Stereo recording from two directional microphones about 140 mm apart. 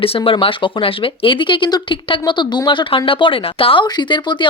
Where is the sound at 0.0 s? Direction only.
40° left (ahead or behind).